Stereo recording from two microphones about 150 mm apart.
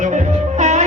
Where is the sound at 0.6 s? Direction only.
55° right (ahead or behind).